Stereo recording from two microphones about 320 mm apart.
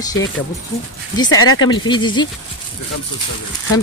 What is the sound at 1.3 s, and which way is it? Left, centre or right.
Speech, left.